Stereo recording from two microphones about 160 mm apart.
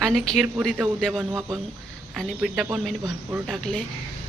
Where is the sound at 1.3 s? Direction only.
20° right (ahead or behind).